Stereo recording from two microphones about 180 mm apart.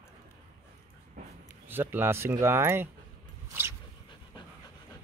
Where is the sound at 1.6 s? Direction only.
10° right (ahead or behind).